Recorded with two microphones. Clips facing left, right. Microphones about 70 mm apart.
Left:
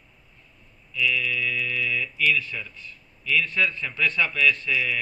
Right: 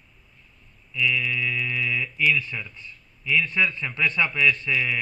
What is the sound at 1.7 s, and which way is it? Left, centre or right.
Speech, centre.